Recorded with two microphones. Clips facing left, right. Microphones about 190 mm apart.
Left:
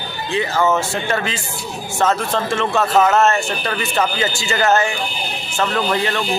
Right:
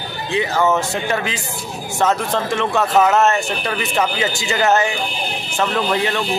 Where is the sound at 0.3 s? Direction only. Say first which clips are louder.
Even; 15° right (ahead or behind).